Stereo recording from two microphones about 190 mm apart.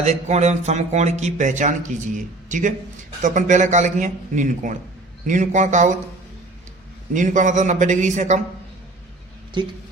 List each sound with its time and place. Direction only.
0.0 s speech: 35° right (ahead or behind)
7.1 s speech: 40° right (ahead or behind)
9.6 s speech: 25° right (ahead or behind)